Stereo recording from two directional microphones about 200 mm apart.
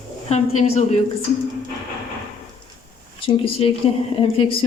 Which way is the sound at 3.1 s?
25° left (ahead or behind).